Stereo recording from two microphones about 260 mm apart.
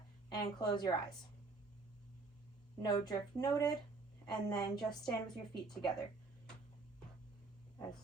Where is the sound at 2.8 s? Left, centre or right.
Centre.